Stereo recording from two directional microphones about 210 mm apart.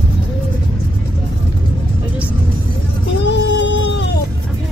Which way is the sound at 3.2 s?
55° left (ahead or behind).